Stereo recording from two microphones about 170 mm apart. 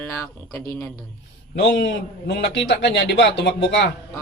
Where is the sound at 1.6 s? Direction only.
90° left.